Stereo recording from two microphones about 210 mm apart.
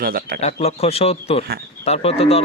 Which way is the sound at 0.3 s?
30° left (ahead or behind).